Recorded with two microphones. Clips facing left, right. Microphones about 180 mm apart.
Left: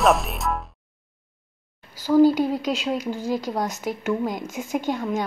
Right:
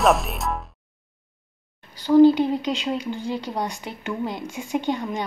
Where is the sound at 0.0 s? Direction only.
Centre (ahead or behind).